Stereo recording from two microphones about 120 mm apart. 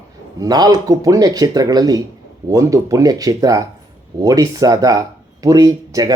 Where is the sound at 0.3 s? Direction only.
35° right (ahead or behind).